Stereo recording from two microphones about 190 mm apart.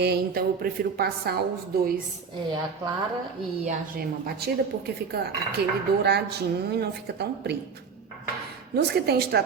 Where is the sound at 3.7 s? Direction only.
50° right (ahead or behind).